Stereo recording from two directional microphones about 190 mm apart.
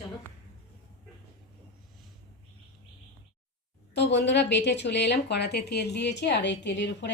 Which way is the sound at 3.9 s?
65° left (ahead or behind).